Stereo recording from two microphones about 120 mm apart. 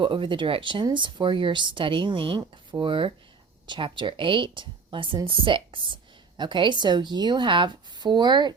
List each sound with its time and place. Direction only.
0.0 s speech: 45° right (ahead or behind)